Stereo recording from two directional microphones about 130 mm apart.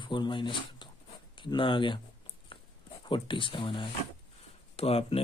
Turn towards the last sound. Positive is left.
turn(degrees=50)  # may be behind; listen again after turning